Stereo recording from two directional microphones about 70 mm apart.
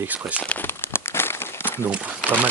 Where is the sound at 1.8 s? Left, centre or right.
Right.